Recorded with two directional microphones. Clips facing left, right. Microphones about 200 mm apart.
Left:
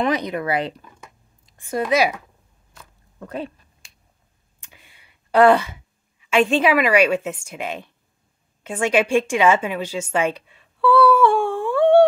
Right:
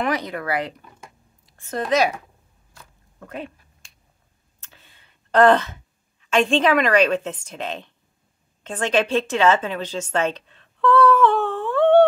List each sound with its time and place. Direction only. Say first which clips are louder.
0.0 s speech: left 3 dB; 20° left (ahead or behind)
1.4 s a woman's voice: left 3 dB; 15° left (ahead or behind)
3.2 s speech: left 4 dB; 35° left (ahead or behind)
4.6 s a sound: left 1 dB; 15° left (ahead or behind)
8.6 s a woman's voice: left 2 dB; 10° left (ahead or behind)